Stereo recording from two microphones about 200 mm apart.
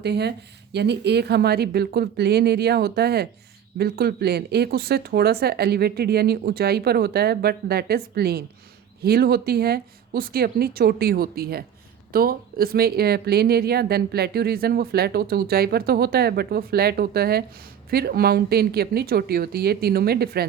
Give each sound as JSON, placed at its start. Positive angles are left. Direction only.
{"t": 0.0, "sound": "speech", "side_deg": -55}